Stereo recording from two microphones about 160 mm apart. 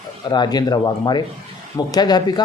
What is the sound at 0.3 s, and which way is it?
Speech, 25° left (ahead or behind).